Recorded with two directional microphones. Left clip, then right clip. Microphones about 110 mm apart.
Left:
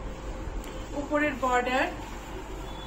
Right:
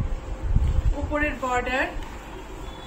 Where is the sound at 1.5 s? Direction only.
20° right (ahead or behind).